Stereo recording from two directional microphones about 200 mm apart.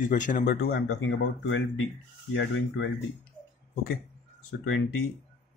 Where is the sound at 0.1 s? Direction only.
40° left (ahead or behind).